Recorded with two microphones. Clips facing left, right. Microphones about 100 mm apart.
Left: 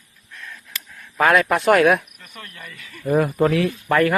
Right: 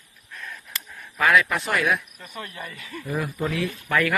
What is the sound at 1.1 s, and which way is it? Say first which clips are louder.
Speech: left 4 dB; 45° left (ahead or behind).